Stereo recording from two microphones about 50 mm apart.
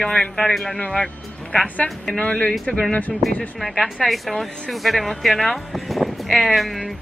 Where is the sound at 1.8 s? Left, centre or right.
Centre.